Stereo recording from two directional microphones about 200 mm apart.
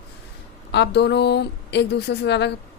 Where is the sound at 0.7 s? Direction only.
60° left (ahead or behind).